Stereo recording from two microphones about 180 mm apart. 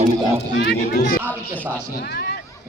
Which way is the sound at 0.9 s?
45° left (ahead or behind).